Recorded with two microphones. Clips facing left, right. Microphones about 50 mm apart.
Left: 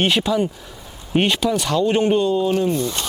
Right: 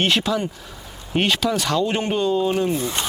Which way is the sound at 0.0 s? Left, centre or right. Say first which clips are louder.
Left 2 dB; centre.